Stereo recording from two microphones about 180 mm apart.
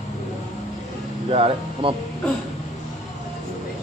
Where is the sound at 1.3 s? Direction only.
30° right (ahead or behind).